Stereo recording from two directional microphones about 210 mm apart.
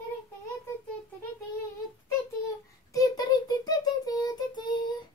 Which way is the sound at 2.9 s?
15° left (ahead or behind).